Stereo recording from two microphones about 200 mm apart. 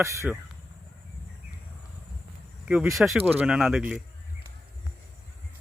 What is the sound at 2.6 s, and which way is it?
Speech, 5° right (ahead or behind).